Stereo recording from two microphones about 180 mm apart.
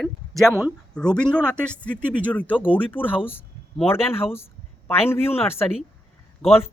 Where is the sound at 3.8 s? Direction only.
30° left (ahead or behind).